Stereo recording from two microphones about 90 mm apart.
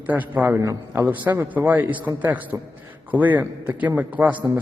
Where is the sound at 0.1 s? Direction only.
20° right (ahead or behind).